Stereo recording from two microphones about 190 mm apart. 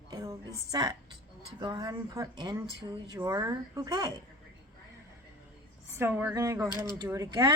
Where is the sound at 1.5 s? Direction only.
20° right (ahead or behind).